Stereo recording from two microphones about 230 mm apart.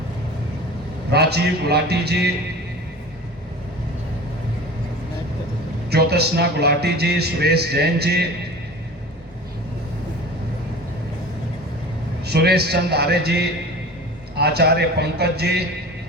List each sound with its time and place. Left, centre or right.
1.1 s music: right
5.9 s music: right
12.2 s music: right